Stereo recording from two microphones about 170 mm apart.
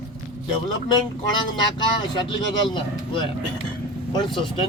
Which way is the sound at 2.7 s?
30° left (ahead or behind).